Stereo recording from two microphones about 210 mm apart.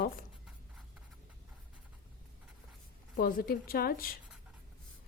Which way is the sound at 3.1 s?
45° left (ahead or behind).